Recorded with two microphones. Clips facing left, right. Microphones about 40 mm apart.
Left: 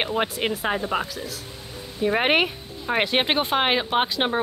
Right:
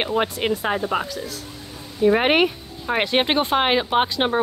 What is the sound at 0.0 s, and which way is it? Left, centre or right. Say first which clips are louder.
Speech: right 2 dB; centre.